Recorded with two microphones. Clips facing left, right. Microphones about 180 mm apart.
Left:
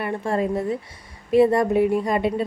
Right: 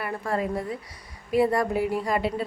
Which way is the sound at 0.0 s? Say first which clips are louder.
Left 4 dB; 25° left (ahead or behind).